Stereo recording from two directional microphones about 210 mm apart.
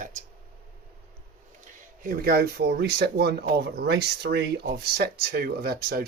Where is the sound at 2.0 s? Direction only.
45° right (ahead or behind).